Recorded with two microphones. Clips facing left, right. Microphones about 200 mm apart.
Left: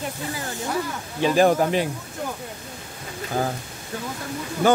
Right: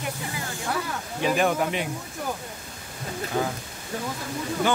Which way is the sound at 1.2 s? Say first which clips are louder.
Left 5 dB; 35° left (ahead or behind).